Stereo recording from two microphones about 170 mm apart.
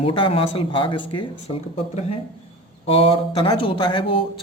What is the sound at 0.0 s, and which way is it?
Speech, 30° left (ahead or behind).